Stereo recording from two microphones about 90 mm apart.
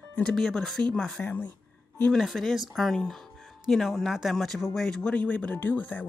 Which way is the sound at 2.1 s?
Centre (ahead or behind).